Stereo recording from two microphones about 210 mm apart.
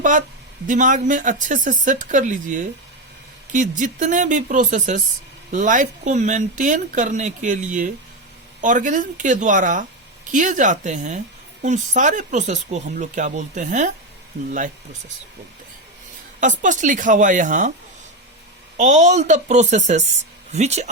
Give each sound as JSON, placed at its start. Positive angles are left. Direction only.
{"t": 0.0, "sound": "speech", "side_deg": -40}
{"t": 16.4, "sound": "speech", "side_deg": -35}
{"t": 18.8, "sound": "speech", "side_deg": -35}